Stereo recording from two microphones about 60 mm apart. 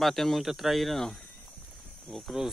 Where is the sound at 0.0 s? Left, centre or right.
Centre.